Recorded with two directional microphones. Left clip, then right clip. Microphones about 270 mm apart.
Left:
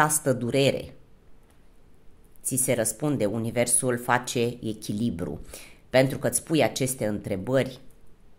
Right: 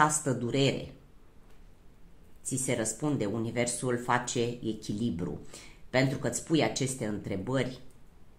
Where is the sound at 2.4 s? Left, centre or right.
Left.